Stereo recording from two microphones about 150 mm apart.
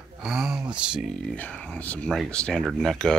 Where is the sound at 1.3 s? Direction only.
10° left (ahead or behind).